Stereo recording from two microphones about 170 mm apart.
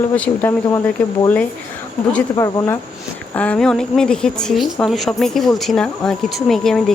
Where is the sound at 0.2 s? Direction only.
10° left (ahead or behind).